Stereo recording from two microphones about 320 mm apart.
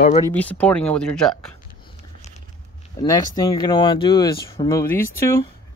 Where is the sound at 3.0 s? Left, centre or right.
Centre.